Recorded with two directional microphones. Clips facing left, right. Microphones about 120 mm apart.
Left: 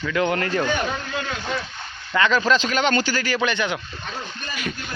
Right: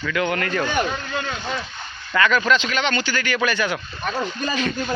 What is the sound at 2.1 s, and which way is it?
Speech, 25° left (ahead or behind).